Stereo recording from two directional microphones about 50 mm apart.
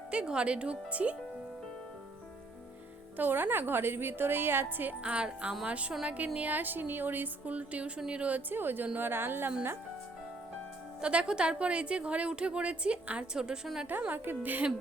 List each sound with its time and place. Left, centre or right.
0.1 s a woman's voice: right
3.2 s a woman's voice: right
5.0 s a woman's voice: right
8.4 s a woman's voice: right
11.0 s a woman's voice: right
14.1 s a woman's voice: right